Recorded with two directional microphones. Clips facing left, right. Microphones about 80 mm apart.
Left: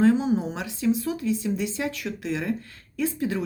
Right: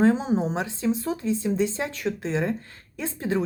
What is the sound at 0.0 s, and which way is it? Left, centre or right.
Speech, right.